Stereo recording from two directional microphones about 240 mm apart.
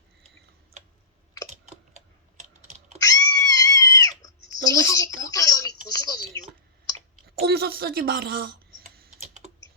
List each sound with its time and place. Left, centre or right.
1.6 s typing: right
2.4 s computer keyboard: right
3.0 s pig: centre
4.7 s a woman's voice: centre
5.2 s a sound: centre
7.4 s speech: right
8.8 s typing: right